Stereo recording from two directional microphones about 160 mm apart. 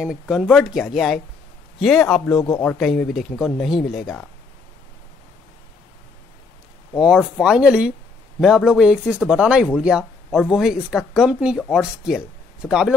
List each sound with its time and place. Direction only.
0.0 s speech: 5° right (ahead or behind)
7.0 s speech: 5° right (ahead or behind)